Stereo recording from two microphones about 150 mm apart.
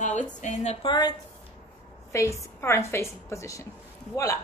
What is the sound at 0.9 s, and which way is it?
A woman's voice, 30° left (ahead or behind).